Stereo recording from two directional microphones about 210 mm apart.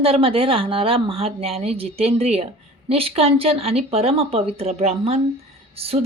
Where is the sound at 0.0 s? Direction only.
25° right (ahead or behind).